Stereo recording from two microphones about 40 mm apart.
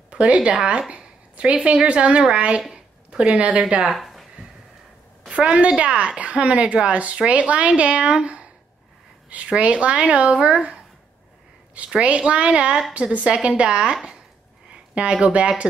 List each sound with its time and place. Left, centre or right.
0.1 s a woman's voice: right
2.7 s a sound: right
3.3 s a woman's voice: right
3.9 s a sound: centre
5.3 s a woman's voice: right
9.6 s speech: right
11.8 s a woman's voice: right
14.7 s a sound: right
15.2 s speech: right